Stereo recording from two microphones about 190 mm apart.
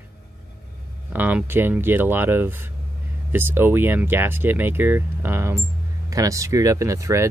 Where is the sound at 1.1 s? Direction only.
10° right (ahead or behind).